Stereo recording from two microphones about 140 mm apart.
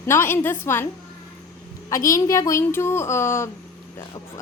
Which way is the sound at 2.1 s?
25° left (ahead or behind).